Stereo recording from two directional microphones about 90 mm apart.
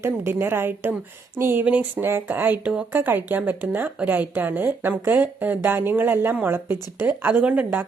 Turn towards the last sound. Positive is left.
turn(degrees=-20)  # may be behind; listen again after turning